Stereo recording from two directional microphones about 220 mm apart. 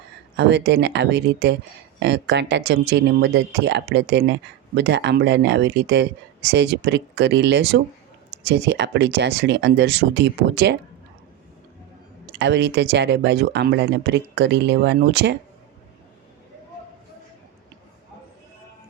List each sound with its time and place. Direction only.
0.3 s speech: 50° right (ahead or behind)
12.3 s speech: 50° right (ahead or behind)